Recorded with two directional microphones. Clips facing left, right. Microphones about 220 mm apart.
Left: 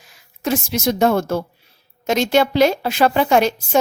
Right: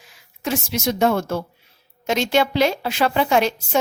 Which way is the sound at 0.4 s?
40° left (ahead or behind).